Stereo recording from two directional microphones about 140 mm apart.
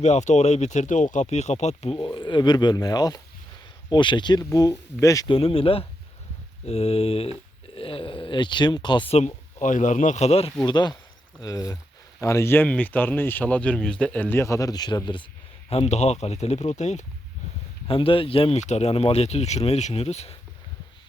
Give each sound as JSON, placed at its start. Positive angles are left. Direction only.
{"t": 0.0, "sound": "speech", "side_deg": 55}
{"t": 2.1, "sound": "speech", "side_deg": 35}
{"t": 5.3, "sound": "speech", "side_deg": 40}
{"t": 9.1, "sound": "speech", "side_deg": 60}
{"t": 10.7, "sound": "speech", "side_deg": 30}
{"t": 15.7, "sound": "speech", "side_deg": 50}
{"t": 17.8, "sound": "speech", "side_deg": 40}
{"t": 18.6, "sound": "speech", "side_deg": 55}